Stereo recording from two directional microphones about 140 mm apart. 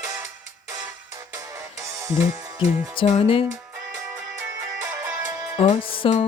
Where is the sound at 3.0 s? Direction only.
45° left (ahead or behind).